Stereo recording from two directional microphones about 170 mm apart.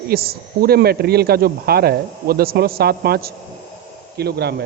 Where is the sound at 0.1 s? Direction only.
60° right (ahead or behind).